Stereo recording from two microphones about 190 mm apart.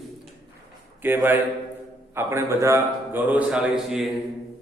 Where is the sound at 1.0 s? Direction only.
10° right (ahead or behind).